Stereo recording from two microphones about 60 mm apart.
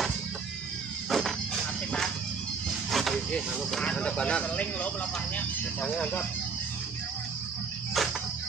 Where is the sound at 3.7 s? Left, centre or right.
Centre.